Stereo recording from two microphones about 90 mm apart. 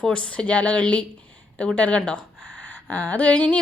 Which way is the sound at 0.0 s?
10° left (ahead or behind).